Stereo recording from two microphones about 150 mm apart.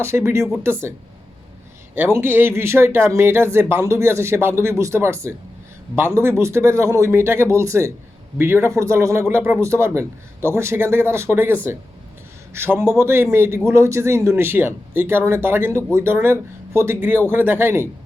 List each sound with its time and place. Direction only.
0.0 s speech: 15° right (ahead or behind)
2.1 s speech: 15° right (ahead or behind)
12.5 s speech: 15° right (ahead or behind)